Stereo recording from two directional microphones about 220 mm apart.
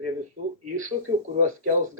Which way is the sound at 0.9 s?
35° right (ahead or behind).